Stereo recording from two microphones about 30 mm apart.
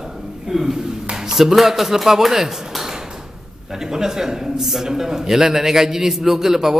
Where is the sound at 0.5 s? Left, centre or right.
Centre.